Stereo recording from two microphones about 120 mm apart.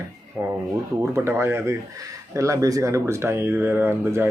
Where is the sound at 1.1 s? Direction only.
20° right (ahead or behind).